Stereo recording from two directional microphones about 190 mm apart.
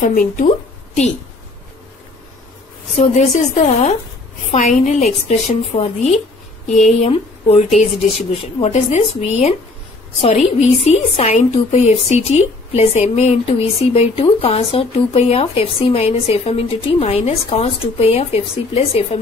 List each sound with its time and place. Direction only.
0.0 s speech: 45° left (ahead or behind)
3.3 s speech: 40° left (ahead or behind)